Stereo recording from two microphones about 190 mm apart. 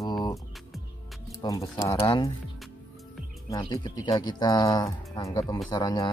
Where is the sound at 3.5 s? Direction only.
20° left (ahead or behind).